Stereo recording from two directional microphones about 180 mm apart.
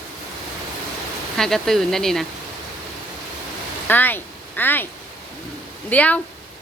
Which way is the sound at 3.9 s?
10° left (ahead or behind).